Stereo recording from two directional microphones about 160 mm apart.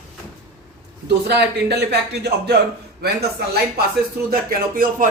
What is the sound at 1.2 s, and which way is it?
Speech, 90° right.